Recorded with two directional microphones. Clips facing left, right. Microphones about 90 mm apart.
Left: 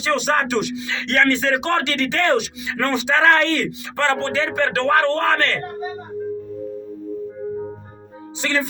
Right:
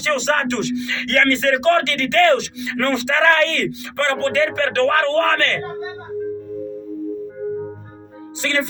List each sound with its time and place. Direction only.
0.0 s speech: 5° left (ahead or behind)
8.4 s speech: 20° left (ahead or behind)